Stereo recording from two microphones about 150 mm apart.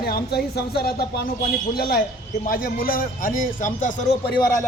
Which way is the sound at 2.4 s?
70° left (ahead or behind).